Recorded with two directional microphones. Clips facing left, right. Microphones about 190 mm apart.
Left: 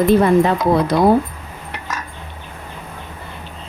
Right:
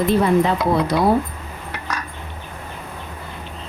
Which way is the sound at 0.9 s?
55° left (ahead or behind).